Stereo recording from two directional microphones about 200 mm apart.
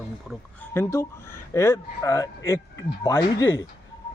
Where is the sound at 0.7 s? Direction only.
10° left (ahead or behind).